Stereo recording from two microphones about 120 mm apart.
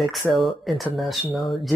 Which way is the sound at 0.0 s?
Centre (ahead or behind).